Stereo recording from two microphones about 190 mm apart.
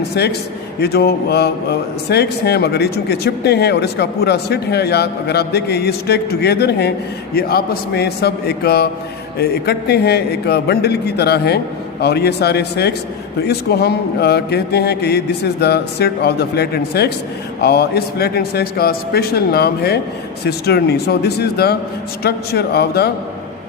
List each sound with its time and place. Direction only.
0.1 s speech: 60° left (ahead or behind)